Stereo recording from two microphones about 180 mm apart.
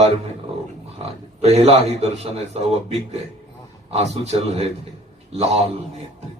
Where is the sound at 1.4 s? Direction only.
35° right (ahead or behind).